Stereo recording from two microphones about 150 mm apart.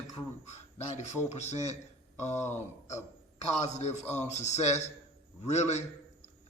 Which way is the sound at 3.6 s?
50° left (ahead or behind).